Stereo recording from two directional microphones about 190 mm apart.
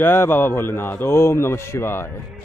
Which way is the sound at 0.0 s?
10° left (ahead or behind).